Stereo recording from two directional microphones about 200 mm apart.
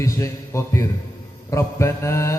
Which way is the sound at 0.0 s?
15° left (ahead or behind).